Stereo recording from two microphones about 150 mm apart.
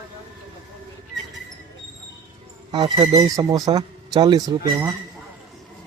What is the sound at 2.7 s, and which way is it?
Speech, 30° right (ahead or behind).